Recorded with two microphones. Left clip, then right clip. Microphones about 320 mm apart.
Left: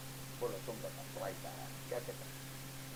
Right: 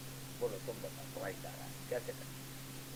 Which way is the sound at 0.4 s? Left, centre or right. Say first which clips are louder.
Right 2 dB; right.